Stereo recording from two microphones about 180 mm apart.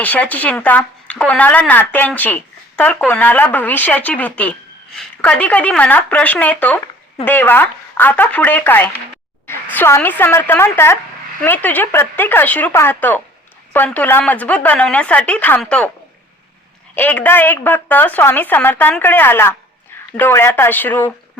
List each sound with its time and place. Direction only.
0.0 s speech: 10° left (ahead or behind)
16.9 s speech: 10° left (ahead or behind)